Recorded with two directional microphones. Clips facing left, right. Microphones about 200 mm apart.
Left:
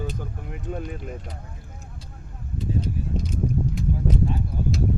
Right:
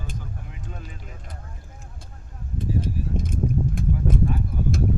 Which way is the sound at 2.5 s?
50° right (ahead or behind).